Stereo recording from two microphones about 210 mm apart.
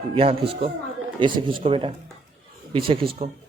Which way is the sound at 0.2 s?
25° right (ahead or behind).